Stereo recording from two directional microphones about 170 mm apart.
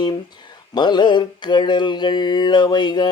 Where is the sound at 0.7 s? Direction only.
25° left (ahead or behind).